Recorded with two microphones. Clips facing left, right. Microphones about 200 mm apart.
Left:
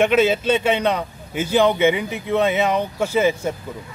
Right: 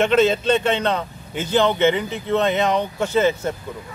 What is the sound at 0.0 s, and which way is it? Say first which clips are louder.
A man's voice: even; 10° left (ahead or behind).